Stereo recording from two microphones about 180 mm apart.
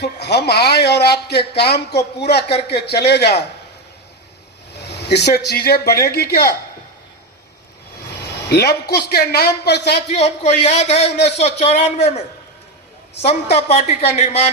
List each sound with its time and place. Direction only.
0.0 s a man's voice: 65° left (ahead or behind)
4.7 s speech: 70° left (ahead or behind)
7.9 s a man's voice: 65° left (ahead or behind)
10.2 s speech: 40° left (ahead or behind)
13.2 s speech: 35° left (ahead or behind)